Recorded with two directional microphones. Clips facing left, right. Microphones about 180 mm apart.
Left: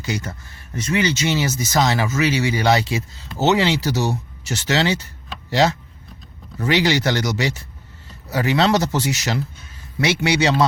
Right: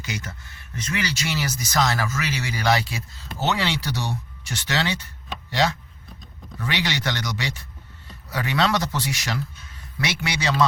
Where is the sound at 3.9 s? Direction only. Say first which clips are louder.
Left 8 dB; 40° left (ahead or behind).